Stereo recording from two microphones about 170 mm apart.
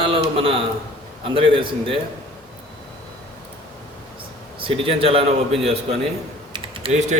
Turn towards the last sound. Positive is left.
turn(degrees=-30)  # may be behind; listen again after turning